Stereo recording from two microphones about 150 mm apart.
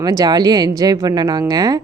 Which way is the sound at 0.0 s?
25° right (ahead or behind).